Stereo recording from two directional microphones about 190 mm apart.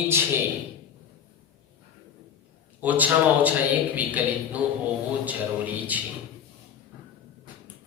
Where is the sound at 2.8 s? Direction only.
10° right (ahead or behind).